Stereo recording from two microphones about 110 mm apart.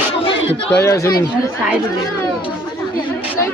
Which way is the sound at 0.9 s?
25° left (ahead or behind).